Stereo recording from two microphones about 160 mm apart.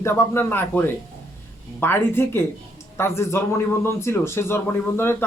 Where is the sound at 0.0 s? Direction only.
15° left (ahead or behind).